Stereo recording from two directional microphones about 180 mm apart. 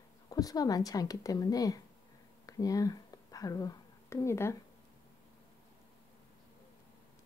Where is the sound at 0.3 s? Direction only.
20° left (ahead or behind).